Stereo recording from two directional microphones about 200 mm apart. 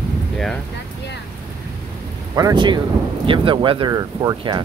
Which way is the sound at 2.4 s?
20° right (ahead or behind).